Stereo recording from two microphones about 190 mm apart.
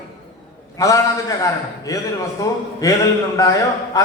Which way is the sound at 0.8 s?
15° left (ahead or behind).